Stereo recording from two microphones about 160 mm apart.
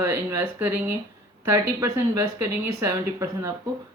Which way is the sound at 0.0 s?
15° right (ahead or behind).